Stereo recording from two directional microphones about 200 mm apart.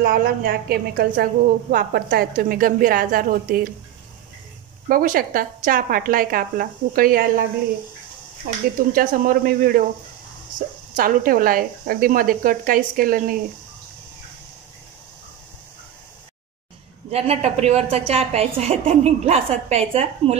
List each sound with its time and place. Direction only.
0.0 s a woman's voice: 45° right (ahead or behind)
4.8 s a woman's voice: 45° right (ahead or behind)
8.5 s a woman's voice: 40° right (ahead or behind)
11.0 s a woman's voice: 45° right (ahead or behind)
17.1 s a woman's voice: 30° right (ahead or behind)